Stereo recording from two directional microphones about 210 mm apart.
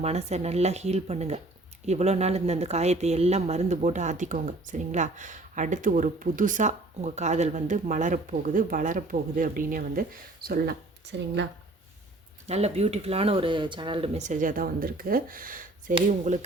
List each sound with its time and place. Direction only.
0.0 s speech: 30° right (ahead or behind); by 11.4 s 55° right (ahead or behind)
12.5 s speech: 30° right (ahead or behind)